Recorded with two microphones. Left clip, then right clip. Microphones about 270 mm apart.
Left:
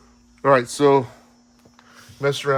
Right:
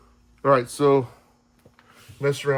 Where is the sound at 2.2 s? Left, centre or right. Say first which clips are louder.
Left 2 dB; left.